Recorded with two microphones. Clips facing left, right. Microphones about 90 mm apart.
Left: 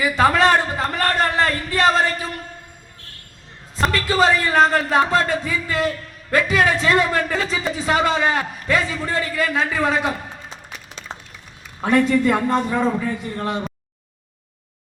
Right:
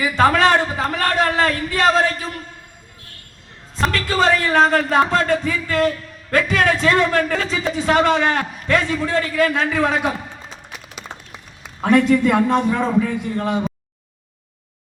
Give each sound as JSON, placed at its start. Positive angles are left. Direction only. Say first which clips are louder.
{"t": 0.0, "sound": "a sound", "louder": "right 1 dB", "side_deg": 5}
{"t": 3.8, "sound": "speech", "louder": "left 1 dB", "side_deg": 0}
{"t": 11.0, "sound": "applause", "louder": "even", "side_deg": -75}
{"t": 11.8, "sound": "speech", "louder": "right 2 dB", "side_deg": 0}